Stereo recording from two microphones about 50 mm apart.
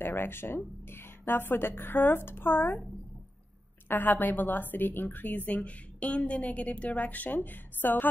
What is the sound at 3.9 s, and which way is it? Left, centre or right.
A woman's voice, left.